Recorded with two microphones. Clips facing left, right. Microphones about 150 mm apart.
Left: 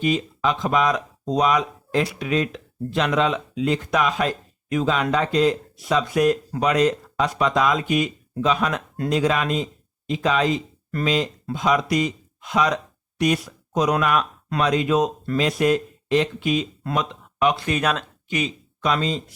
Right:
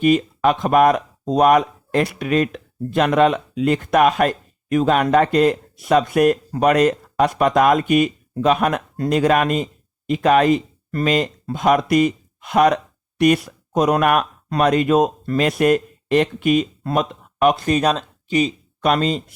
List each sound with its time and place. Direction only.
0.0 s speech: 55° right (ahead or behind); by 18.5 s 35° right (ahead or behind)
18.8 s speech: 55° right (ahead or behind)